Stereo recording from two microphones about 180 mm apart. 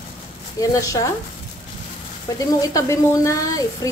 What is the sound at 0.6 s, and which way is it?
Speech, 20° left (ahead or behind).